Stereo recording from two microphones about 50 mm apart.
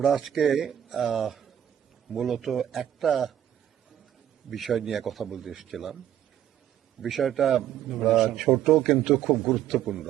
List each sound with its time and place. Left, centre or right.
0.0 s a man's voice: centre
4.4 s a man's voice: centre
7.0 s a man's voice: centre